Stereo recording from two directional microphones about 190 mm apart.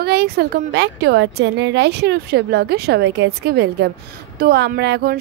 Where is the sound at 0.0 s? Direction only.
60° right (ahead or behind).